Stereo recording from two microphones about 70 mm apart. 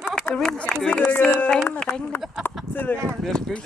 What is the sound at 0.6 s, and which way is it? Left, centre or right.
Speech, centre.